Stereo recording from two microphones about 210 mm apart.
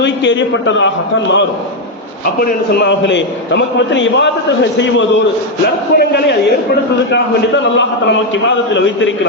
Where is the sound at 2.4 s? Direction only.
50° left (ahead or behind).